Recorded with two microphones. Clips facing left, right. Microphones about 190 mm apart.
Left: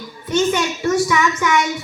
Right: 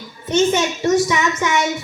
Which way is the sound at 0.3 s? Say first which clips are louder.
Right 2 dB; 25° right (ahead or behind).